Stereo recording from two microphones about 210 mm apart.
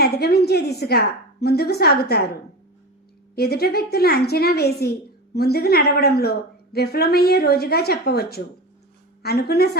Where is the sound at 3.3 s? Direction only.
50° left (ahead or behind).